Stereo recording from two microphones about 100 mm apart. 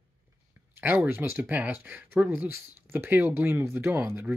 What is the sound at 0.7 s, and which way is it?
Speech, 20° right (ahead or behind).